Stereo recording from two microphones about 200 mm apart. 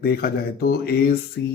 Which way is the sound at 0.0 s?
50° left (ahead or behind).